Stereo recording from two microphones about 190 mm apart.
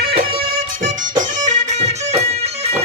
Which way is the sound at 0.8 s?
40° right (ahead or behind).